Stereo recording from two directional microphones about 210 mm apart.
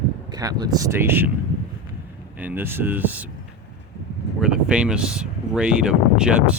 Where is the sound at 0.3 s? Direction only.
20° right (ahead or behind).